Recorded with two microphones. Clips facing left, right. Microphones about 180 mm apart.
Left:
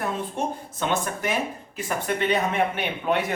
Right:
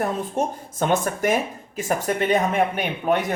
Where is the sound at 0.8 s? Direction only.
45° right (ahead or behind).